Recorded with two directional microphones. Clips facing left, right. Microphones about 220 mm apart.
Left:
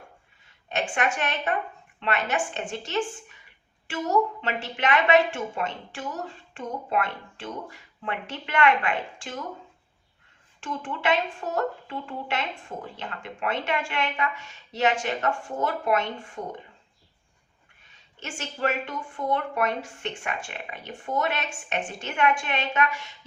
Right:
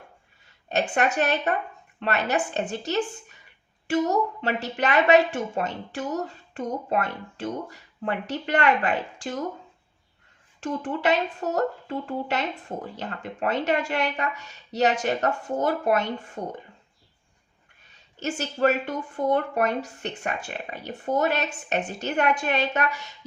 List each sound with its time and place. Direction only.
0.7 s speech: 40° right (ahead or behind)
10.6 s speech: 40° right (ahead or behind)
18.2 s speech: 40° right (ahead or behind)